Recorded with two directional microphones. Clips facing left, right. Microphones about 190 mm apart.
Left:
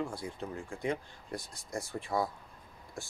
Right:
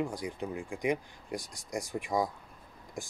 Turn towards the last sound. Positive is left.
turn(degrees=-15)  # may be behind; listen again after turning